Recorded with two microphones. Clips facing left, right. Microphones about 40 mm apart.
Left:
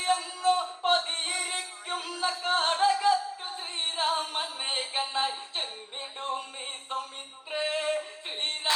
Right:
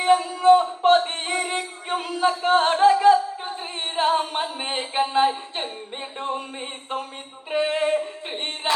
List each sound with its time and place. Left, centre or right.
0.0 s music: right
6.1 s a sound: right
7.5 s singing: right